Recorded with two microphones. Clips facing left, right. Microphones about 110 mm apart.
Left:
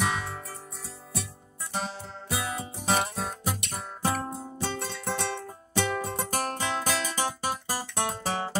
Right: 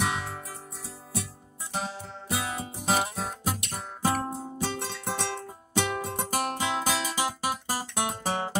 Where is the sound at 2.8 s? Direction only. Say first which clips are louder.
Even; 5° right (ahead or behind).